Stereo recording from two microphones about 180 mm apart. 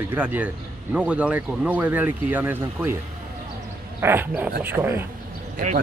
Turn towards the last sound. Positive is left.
turn(degrees=-50)  # may be behind; listen again after turning